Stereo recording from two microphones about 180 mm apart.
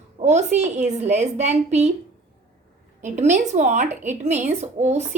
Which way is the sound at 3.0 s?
40° right (ahead or behind).